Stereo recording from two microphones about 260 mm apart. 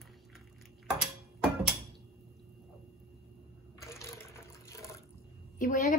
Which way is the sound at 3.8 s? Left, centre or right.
Centre.